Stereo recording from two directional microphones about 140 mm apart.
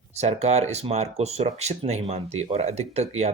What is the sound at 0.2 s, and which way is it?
Speech, 50° right (ahead or behind).